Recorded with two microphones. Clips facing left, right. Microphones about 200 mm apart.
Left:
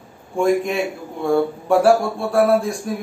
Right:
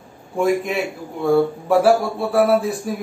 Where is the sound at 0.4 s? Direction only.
Centre (ahead or behind).